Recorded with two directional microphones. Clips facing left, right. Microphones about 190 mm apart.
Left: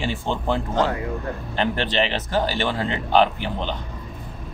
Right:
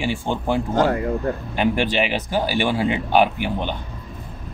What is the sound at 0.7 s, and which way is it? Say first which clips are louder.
Speech: right 4 dB; 45° right (ahead or behind).